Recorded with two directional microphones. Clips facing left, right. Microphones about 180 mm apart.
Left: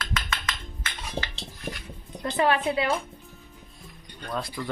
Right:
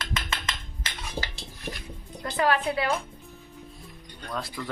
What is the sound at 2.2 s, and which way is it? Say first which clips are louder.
Speech: left 1 dB; 20° left (ahead or behind).